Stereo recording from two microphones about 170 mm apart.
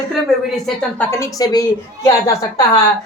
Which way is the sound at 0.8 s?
10° left (ahead or behind).